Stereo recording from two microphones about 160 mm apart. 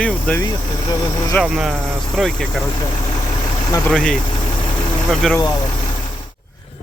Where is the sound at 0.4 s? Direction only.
25° left (ahead or behind).